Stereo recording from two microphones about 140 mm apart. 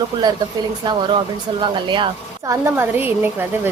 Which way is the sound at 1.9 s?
35° right (ahead or behind).